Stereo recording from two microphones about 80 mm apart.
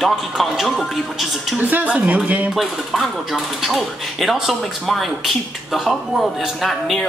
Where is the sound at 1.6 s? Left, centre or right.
Centre.